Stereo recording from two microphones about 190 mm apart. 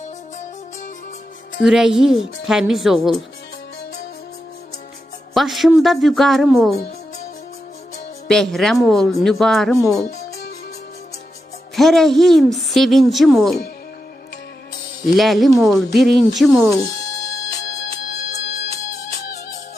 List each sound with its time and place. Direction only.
1.6 s speech: centre (ahead or behind)
5.3 s speech: centre (ahead or behind)
8.3 s speech: centre (ahead or behind)
11.8 s speech: centre (ahead or behind)
15.0 s speech: centre (ahead or behind)
18.1 s music: 60° left (ahead or behind)